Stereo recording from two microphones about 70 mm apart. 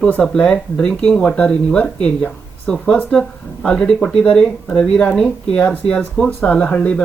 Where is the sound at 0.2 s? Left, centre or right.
Centre.